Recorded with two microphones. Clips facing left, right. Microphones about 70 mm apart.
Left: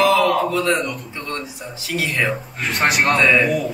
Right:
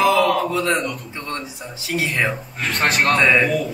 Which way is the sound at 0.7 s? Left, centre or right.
Centre.